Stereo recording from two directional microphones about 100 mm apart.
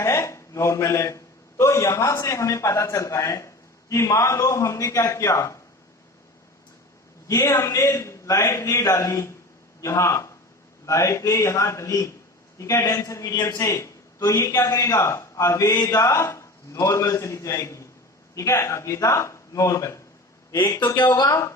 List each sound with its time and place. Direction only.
0.0 s a man's voice: 30° left (ahead or behind)
7.3 s a man's voice: 30° left (ahead or behind)